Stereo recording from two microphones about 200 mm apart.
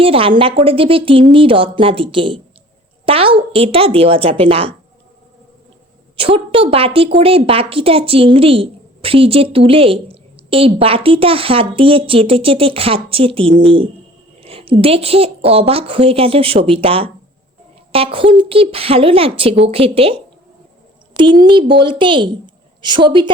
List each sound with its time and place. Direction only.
0.0 s a woman's voice: 25° right (ahead or behind)
6.1 s a woman's voice: 25° right (ahead or behind)
21.2 s a woman's voice: 25° right (ahead or behind)